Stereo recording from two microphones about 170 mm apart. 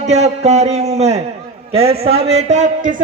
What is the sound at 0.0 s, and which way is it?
A man's voice, 40° right (ahead or behind).